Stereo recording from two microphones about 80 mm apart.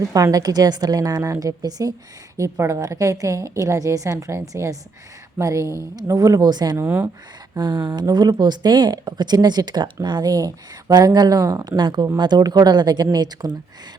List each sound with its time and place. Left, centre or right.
0.1 s a woman's voice: right
2.4 s a woman's voice: right
6.8 s speech: right
7.6 s speech: right
8.4 s speech: right
11.8 s speech: right